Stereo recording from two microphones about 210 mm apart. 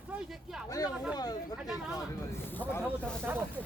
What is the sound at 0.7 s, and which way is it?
Speech, 15° left (ahead or behind).